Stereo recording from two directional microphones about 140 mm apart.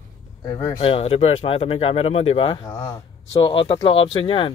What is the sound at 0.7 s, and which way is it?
Speech, 45° left (ahead or behind).